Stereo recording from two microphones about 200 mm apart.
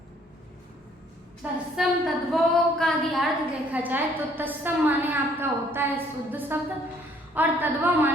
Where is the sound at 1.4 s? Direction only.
Centre (ahead or behind).